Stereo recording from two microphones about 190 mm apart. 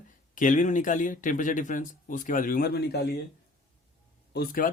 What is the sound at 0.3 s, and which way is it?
Speech, 45° left (ahead or behind).